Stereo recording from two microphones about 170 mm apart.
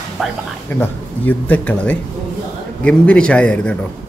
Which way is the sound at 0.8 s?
10° left (ahead or behind).